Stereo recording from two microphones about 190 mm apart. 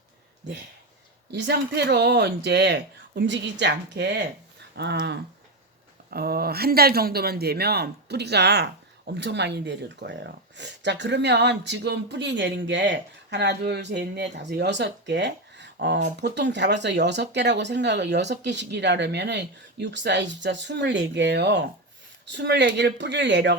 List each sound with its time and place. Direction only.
1.3 s speech: 60° right (ahead or behind)